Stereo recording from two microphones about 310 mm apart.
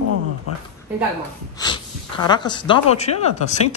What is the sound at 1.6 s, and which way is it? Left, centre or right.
Speech, centre.